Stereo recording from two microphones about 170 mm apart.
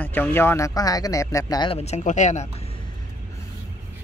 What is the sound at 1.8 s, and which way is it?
Speech, 45° left (ahead or behind).